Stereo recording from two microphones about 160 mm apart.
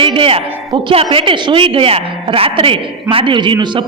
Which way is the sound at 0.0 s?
30° right (ahead or behind).